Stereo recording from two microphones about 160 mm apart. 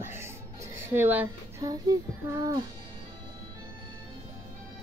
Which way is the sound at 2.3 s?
20° right (ahead or behind).